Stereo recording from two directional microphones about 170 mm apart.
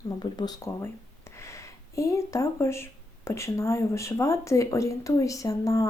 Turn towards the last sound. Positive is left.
turn(degrees=20)  # may be behind; listen again after turning